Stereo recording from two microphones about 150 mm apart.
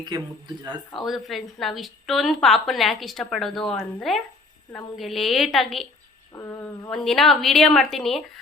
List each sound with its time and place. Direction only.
0.0 s speech: 30° right (ahead or behind)
0.9 s a woman's voice: centre (ahead or behind)
6.3 s speech: 15° left (ahead or behind)
6.9 s a woman's voice: centre (ahead or behind)